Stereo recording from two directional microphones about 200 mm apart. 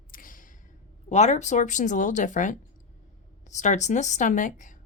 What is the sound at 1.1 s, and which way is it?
Speech, 35° left (ahead or behind).